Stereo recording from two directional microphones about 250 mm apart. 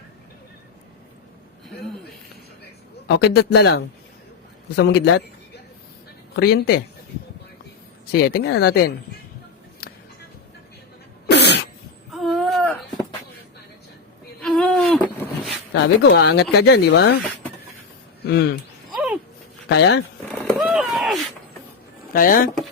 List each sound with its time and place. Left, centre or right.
3.1 s speech: left
6.3 s speech: left
8.1 s speech: left
11.3 s cough: left
12.1 s wail: centre
14.4 s vehicle: centre
15.7 s speech: left
18.2 s a sound: left
18.9 s a sound: centre
19.6 s speech: left
20.6 s a sound: centre
22.1 s speech: left